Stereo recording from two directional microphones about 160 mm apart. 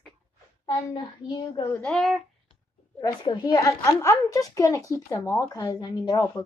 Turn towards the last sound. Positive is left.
turn(degrees=20)  # may be behind; listen again after turning